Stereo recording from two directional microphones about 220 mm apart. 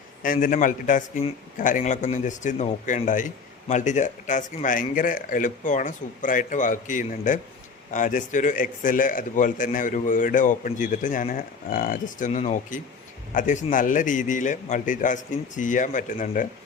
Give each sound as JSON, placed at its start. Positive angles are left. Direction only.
{"t": 0.2, "sound": "speech", "side_deg": 40}